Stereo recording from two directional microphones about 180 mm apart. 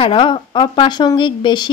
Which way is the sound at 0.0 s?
30° left (ahead or behind).